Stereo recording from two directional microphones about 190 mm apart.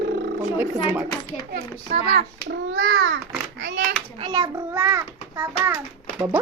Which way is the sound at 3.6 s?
65° right (ahead or behind).